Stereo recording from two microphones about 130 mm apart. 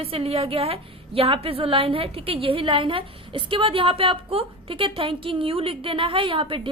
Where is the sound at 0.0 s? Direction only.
50° right (ahead or behind).